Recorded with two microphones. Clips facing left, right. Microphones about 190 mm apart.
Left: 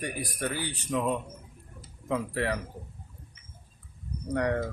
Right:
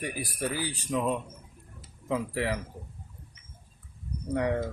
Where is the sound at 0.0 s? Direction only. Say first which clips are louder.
Even; 5° right (ahead or behind).